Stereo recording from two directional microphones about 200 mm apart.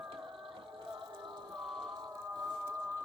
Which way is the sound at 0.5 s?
25° right (ahead or behind).